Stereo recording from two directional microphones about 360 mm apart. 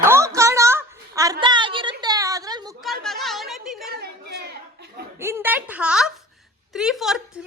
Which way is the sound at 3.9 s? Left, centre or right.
Right.